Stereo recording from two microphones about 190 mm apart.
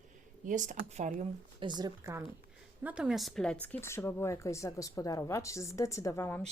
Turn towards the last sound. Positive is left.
turn(degrees=10)  # may be behind; listen again after turning